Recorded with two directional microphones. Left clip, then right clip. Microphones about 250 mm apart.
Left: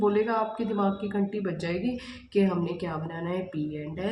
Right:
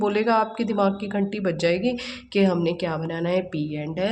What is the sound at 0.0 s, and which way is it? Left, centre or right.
Speech, right.